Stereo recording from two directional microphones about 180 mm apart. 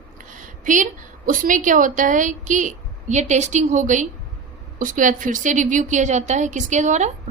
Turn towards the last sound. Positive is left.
turn(degrees=-40)  # may be behind; listen again after turning